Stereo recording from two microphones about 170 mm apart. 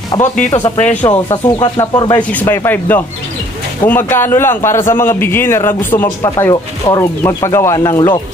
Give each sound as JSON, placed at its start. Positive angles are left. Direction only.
{"t": 0.2, "sound": "speech", "side_deg": 45}
{"t": 1.0, "sound": "speech", "side_deg": 25}
{"t": 2.3, "sound": "a man's voice", "side_deg": 15}